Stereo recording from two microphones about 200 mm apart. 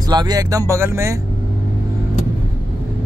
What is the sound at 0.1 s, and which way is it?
Speech, 20° right (ahead or behind).